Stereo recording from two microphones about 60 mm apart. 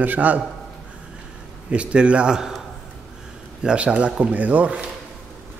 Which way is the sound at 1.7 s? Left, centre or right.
Centre.